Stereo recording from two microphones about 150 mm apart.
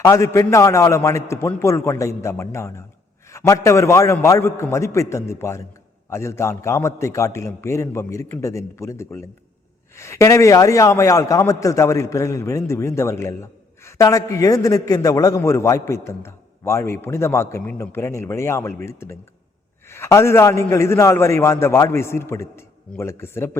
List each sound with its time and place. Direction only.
0.0 s a man's voice: 20° left (ahead or behind)